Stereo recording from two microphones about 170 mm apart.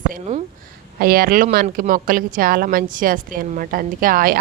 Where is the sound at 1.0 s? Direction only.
60° right (ahead or behind).